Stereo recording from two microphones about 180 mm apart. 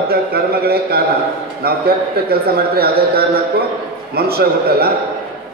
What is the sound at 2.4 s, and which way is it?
A man's voice, 60° right (ahead or behind).